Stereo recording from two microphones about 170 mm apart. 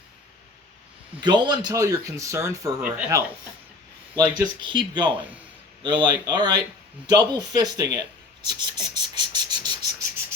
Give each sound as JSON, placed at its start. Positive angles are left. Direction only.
{"t": 1.2, "sound": "speech", "side_deg": -25}
{"t": 5.1, "sound": "a man's voice", "side_deg": -10}
{"t": 6.0, "sound": "speech", "side_deg": -25}
{"t": 8.4, "sound": "cricket", "side_deg": -25}